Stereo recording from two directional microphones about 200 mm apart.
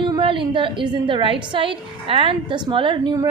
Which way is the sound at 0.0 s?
25° right (ahead or behind).